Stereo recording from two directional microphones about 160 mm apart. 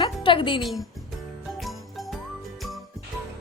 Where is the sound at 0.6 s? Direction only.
Centre (ahead or behind).